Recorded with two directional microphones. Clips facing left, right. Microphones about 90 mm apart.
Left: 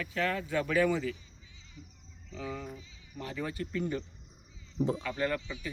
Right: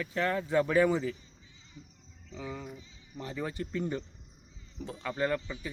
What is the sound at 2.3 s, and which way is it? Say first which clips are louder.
Speech: left 1 dB; 20° right (ahead or behind).